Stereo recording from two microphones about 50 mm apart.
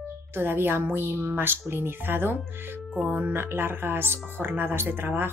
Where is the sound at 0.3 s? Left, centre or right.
Right.